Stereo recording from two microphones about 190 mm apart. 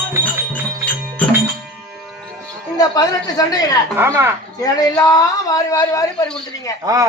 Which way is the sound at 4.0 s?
15° right (ahead or behind).